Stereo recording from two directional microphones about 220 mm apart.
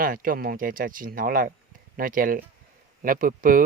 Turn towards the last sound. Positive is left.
turn(degrees=-40)  # may be behind; listen again after turning